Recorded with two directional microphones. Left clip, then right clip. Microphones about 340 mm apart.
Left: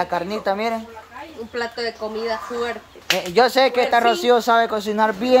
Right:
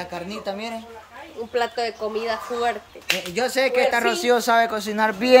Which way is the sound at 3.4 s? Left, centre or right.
Centre.